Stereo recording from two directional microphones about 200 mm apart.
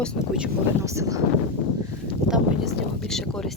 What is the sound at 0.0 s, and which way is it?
Speech, centre (ahead or behind).